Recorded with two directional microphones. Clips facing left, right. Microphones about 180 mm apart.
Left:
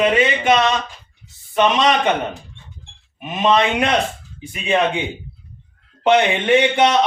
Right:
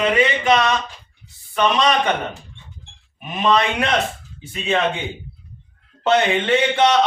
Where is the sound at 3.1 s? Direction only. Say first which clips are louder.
Left 2 dB; 20° left (ahead or behind).